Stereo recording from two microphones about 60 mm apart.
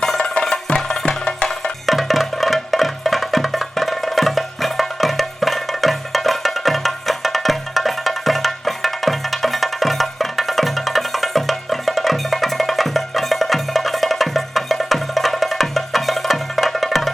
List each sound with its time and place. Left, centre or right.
0.4 s music: centre
1.9 s music: centre